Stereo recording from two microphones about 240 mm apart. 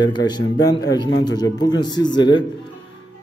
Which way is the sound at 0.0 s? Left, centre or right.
Centre.